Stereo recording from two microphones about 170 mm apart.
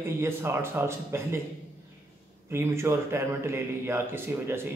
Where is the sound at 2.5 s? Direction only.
15° right (ahead or behind).